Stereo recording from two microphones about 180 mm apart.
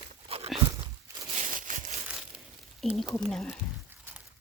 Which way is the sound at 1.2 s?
40° right (ahead or behind).